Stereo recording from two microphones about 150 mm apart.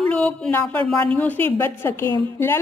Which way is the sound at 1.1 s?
10° left (ahead or behind).